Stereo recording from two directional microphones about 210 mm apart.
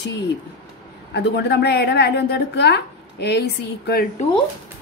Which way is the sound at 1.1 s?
50° left (ahead or behind).